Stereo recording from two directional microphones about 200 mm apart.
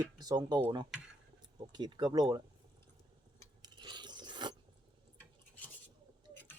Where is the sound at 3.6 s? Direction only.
20° right (ahead or behind).